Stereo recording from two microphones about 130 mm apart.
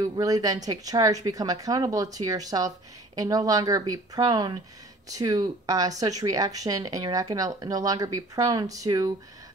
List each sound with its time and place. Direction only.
0.0 s speech: 30° right (ahead or behind)